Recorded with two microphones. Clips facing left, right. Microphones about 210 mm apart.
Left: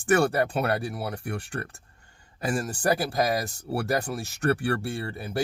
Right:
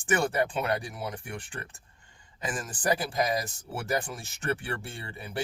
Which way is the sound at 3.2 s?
75° left (ahead or behind).